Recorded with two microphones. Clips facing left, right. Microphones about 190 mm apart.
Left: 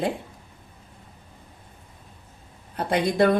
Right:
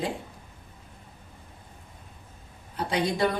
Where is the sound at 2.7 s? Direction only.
55° left (ahead or behind).